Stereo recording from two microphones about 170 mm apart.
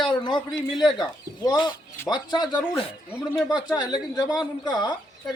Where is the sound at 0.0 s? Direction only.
30° left (ahead or behind).